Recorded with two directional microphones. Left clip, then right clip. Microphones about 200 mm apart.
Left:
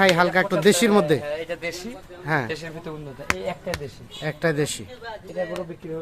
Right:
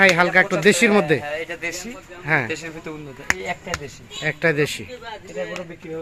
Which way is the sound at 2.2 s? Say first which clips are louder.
Right 4 dB; 5° right (ahead or behind).